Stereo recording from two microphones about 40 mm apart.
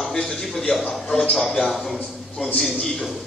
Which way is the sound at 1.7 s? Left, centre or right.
Centre.